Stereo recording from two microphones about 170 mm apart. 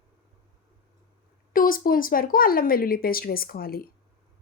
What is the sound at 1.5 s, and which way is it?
Speech, 55° left (ahead or behind).